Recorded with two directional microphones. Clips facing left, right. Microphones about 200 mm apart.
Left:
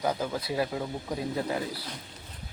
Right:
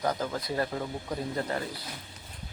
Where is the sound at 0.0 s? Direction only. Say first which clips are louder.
Left 1 dB; 5° left (ahead or behind).